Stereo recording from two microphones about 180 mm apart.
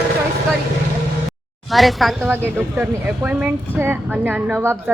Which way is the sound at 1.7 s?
Centre (ahead or behind).